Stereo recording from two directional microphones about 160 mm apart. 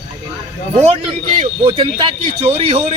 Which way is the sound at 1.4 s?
30° right (ahead or behind).